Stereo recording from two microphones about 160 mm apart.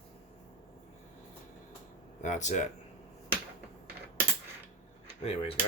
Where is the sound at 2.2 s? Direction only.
50° left (ahead or behind).